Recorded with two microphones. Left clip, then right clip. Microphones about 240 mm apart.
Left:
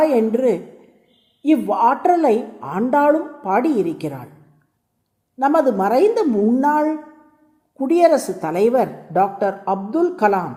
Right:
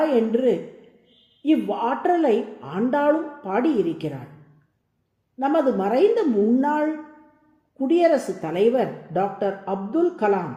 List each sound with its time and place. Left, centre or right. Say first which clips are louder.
0.0 s a woman's voice: left 4 dB; left
5.4 s speech: left 5 dB; left